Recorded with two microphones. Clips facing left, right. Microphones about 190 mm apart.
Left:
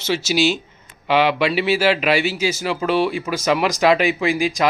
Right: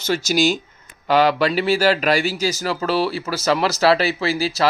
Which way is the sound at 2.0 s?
40° right (ahead or behind).